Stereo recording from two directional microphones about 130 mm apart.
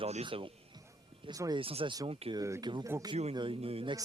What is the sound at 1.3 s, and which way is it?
Speech, 30° right (ahead or behind).